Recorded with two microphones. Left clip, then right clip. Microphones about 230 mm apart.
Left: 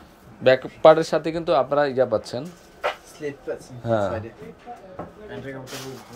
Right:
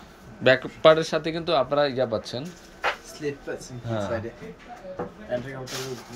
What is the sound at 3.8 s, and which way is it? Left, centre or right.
Speech, left.